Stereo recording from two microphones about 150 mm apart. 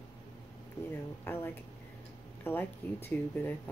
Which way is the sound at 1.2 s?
15° left (ahead or behind).